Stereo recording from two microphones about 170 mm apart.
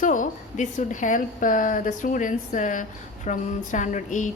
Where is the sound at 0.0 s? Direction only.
50° left (ahead or behind).